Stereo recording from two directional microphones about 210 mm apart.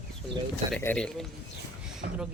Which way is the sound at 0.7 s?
5° left (ahead or behind).